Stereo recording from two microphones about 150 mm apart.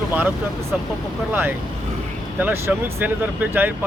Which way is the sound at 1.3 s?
10° right (ahead or behind).